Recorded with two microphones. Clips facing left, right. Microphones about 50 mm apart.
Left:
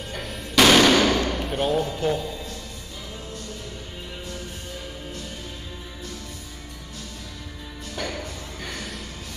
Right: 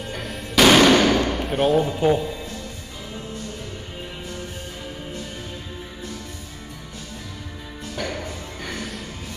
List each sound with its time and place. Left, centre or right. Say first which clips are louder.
0.1 s music: even; centre
1.8 s a man's voice: right 5 dB; centre
7.9 s music: right 2 dB; centre